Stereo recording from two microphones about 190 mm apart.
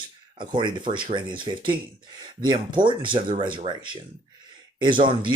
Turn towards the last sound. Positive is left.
turn(degrees=-25)  # may be behind; listen again after turning